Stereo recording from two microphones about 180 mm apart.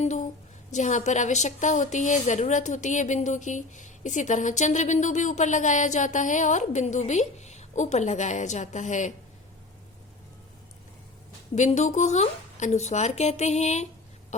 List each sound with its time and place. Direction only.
0.0 s a sound: 40° left (ahead or behind)
0.7 s a woman's voice: 40° left (ahead or behind)
11.5 s a woman's voice: 40° left (ahead or behind)